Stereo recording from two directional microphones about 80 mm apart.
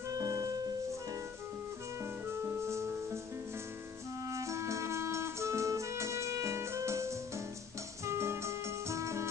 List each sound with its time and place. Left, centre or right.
0.1 s music: right
2.6 s music: right
4.3 s music: right